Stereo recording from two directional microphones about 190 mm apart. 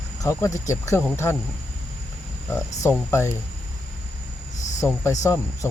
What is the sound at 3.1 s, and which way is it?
Speech, 15° left (ahead or behind).